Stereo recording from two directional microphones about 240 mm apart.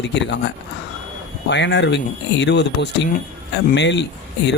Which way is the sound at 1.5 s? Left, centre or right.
Left.